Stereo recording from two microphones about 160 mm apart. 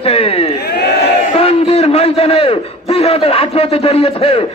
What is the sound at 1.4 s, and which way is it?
A man's voice, 40° left (ahead or behind).